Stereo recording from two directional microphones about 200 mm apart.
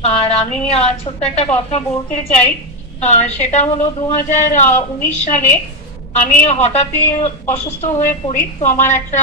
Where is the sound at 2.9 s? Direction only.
35° left (ahead or behind).